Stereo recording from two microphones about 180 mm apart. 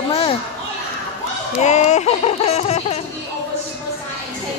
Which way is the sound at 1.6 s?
40° left (ahead or behind).